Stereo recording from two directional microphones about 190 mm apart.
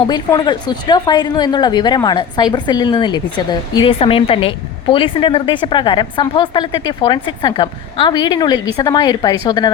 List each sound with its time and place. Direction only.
0.1 s a woman's voice: 20° left (ahead or behind)